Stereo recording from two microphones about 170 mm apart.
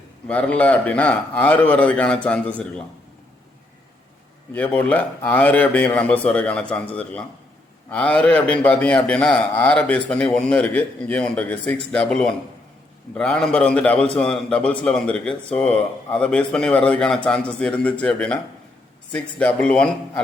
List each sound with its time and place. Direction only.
0.3 s a man's voice: 10° left (ahead or behind)
4.5 s a man's voice: 10° left (ahead or behind)